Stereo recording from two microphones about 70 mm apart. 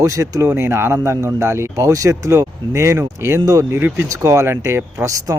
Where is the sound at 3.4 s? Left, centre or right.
Right.